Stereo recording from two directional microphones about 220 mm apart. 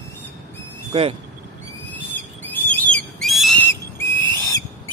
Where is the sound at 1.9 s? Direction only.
10° left (ahead or behind).